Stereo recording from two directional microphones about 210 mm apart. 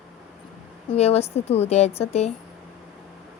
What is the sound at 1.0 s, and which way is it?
A woman's voice, 30° left (ahead or behind).